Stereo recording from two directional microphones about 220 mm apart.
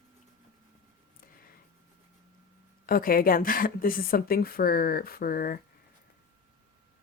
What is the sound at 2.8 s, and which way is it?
Speech, 40° left (ahead or behind).